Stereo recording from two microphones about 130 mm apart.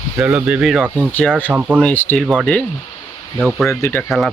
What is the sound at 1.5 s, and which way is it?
Speech, 10° right (ahead or behind).